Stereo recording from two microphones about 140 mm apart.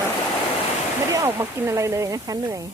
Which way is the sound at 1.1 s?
20° right (ahead or behind).